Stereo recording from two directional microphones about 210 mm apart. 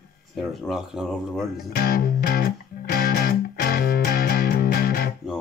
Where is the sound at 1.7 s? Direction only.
45° left (ahead or behind).